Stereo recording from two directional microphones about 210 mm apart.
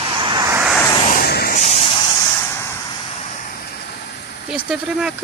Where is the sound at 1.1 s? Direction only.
50° left (ahead or behind).